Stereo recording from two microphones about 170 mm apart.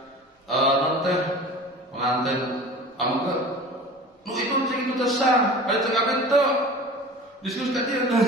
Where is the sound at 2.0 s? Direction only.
Centre (ahead or behind).